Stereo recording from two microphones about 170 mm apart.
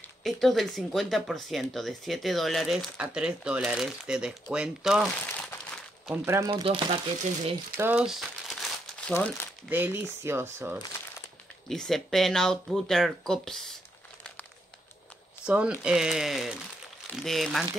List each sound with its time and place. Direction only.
0.2 s speech: centre (ahead or behind)
5.2 s crumpling: 10° left (ahead or behind)
6.2 s speech: 15° right (ahead or behind)
6.5 s speech: 35° right (ahead or behind)
7.7 s crumpling: 10° right (ahead or behind)
9.1 s speech: 10° left (ahead or behind)
9.7 s speech: 10° right (ahead or behind)
11.7 s speech: 5° left (ahead or behind)
15.4 s speech: 5° right (ahead or behind)